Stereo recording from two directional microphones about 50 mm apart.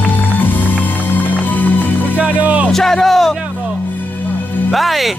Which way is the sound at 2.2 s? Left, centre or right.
Right.